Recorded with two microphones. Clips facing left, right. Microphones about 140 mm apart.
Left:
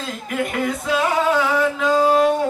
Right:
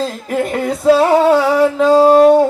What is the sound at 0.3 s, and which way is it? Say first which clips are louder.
Music: right 4 dB; 35° right (ahead or behind).